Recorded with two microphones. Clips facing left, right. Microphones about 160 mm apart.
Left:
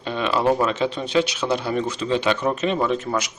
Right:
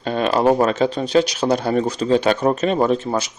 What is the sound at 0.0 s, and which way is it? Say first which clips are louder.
Speech: right 4 dB; 45° right (ahead or behind).